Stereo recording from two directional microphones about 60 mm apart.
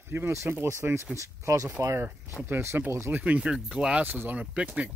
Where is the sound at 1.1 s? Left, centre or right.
Right.